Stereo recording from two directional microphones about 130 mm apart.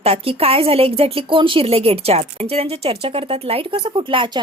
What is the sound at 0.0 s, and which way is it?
Speech, 50° right (ahead or behind).